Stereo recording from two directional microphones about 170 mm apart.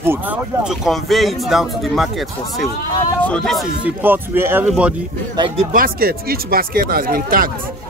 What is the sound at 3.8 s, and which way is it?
Speech, 10° right (ahead or behind).